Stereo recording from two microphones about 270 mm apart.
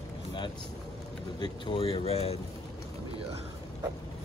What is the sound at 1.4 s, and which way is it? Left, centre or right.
Speech, centre.